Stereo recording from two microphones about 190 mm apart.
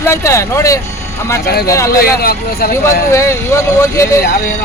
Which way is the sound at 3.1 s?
15° left (ahead or behind).